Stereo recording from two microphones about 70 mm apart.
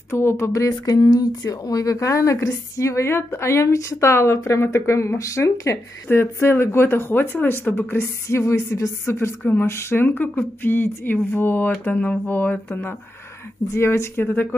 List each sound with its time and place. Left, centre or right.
0.1 s speech: left
6.0 s speech: left
13.7 s speech: left